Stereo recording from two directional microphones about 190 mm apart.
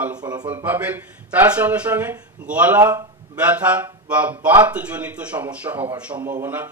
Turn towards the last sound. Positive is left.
turn(degrees=-10)  # may be behind; listen again after turning